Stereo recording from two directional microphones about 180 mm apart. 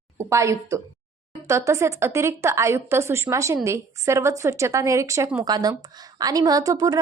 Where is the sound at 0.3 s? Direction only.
15° right (ahead or behind).